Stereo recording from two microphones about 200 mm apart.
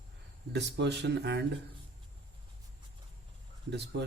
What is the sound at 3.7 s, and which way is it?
Speech, 60° right (ahead or behind).